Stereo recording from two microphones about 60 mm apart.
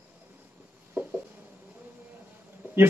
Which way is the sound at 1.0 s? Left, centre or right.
Right.